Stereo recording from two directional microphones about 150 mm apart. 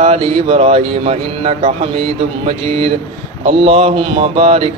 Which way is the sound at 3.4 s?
40° right (ahead or behind).